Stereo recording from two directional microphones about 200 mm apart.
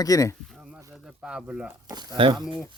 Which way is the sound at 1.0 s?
5° right (ahead or behind).